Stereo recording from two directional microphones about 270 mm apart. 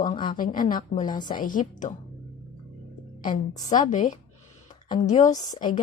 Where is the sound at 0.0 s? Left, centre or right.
Left.